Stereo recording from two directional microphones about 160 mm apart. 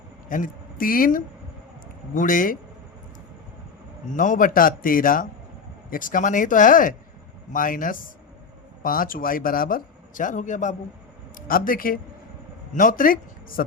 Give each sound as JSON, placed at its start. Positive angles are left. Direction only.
{"t": 0.3, "sound": "speech", "side_deg": 55}
{"t": 4.1, "sound": "speech", "side_deg": 55}
{"t": 11.3, "sound": "speech", "side_deg": 60}